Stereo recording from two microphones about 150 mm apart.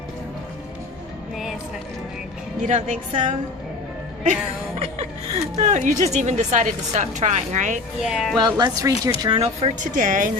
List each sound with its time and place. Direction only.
2.6 s a woman's voice: 55° right (ahead or behind)
4.8 s a woman's voice: 45° right (ahead or behind)
8.1 s speech: centre (ahead or behind)
8.4 s speech: 30° right (ahead or behind)
9.4 s a woman's voice: 45° right (ahead or behind)
9.9 s a woman's voice: 60° right (ahead or behind)